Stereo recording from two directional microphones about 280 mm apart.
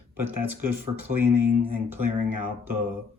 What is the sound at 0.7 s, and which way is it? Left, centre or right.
Speech, right.